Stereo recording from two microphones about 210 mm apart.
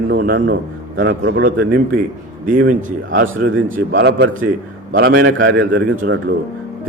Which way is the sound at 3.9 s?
55° right (ahead or behind).